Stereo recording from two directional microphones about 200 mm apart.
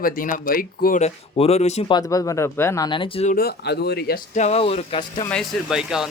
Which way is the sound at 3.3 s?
50° left (ahead or behind).